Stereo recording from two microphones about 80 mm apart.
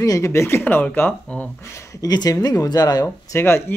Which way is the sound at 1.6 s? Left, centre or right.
Left.